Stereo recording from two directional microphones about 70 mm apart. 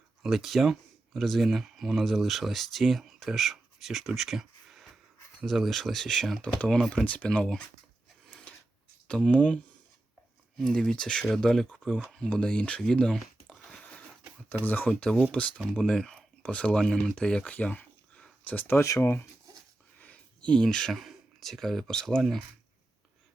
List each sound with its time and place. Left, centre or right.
0.2 s speech: centre
8.3 s a sound: centre
9.0 s speech: centre
10.6 s speech: centre
13.8 s a sound: centre
14.6 s speech: left
14.8 s speech: centre
15.7 s a sound: centre
16.5 s speech: centre
17.4 s a sound: left
18.7 s speech: left
20.0 s speech: centre